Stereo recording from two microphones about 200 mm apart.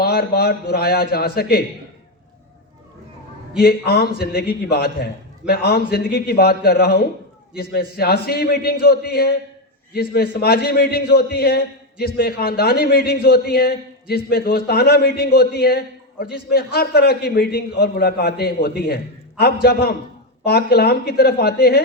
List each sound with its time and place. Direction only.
0.0 s a man's voice: 50° left (ahead or behind)
3.6 s a man's voice: 50° left (ahead or behind)